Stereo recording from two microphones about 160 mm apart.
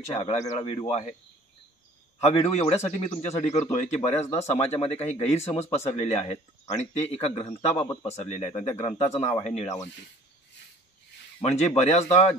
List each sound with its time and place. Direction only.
0.1 s speech: 40° left (ahead or behind)
2.1 s speech: 40° left (ahead or behind)
11.4 s speech: 40° left (ahead or behind)